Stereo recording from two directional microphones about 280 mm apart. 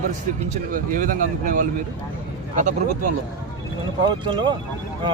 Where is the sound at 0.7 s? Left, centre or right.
Right.